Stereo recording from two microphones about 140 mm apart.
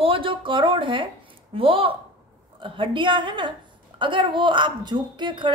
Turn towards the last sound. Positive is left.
turn(degrees=-35)  # may be behind; listen again after turning